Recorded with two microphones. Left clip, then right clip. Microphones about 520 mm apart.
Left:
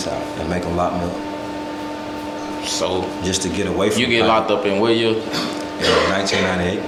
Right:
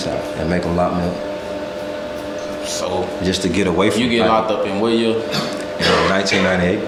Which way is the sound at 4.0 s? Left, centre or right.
Left.